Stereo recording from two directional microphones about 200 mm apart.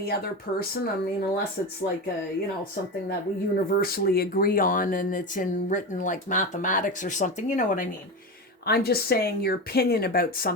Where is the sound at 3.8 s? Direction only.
50° left (ahead or behind).